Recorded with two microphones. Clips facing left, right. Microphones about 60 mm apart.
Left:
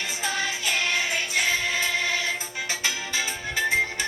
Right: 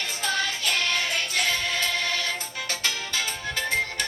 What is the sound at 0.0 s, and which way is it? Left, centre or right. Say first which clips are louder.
Music: even; centre.